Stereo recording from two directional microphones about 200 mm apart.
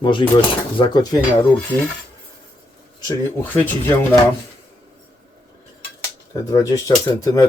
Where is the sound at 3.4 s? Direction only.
10° left (ahead or behind).